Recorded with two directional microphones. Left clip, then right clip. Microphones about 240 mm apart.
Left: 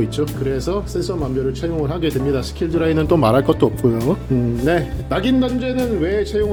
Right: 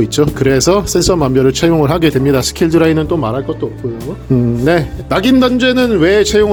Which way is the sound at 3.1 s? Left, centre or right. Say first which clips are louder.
Left 2 dB; centre.